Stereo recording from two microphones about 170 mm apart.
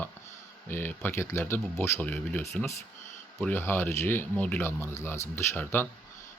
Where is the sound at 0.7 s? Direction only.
15° left (ahead or behind).